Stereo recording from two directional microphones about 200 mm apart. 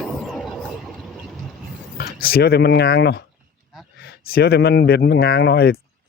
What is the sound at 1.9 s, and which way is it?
Speech, 50° left (ahead or behind).